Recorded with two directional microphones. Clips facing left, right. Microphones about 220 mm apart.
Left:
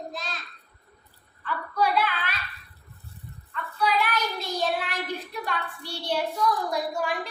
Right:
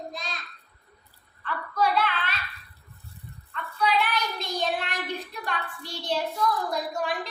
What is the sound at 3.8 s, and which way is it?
Child singing, 10° left (ahead or behind).